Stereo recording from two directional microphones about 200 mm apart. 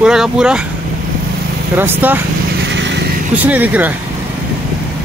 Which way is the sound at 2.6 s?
65° right (ahead or behind).